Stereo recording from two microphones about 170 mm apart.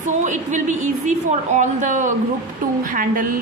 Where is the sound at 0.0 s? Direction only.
45° right (ahead or behind).